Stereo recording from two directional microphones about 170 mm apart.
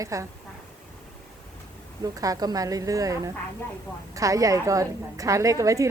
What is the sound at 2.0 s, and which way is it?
A woman's voice, 20° right (ahead or behind).